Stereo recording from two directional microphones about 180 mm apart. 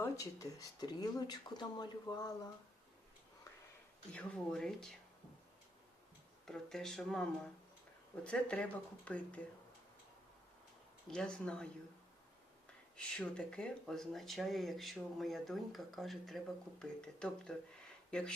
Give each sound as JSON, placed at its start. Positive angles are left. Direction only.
{"t": 0.0, "sound": "speech", "side_deg": 20}
{"t": 4.1, "sound": "speech", "side_deg": 5}
{"t": 6.4, "sound": "speech", "side_deg": 5}
{"t": 11.1, "sound": "speech", "side_deg": 5}
{"t": 13.1, "sound": "speech", "side_deg": 5}